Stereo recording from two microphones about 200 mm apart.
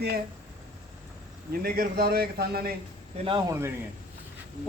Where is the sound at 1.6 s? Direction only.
50° right (ahead or behind).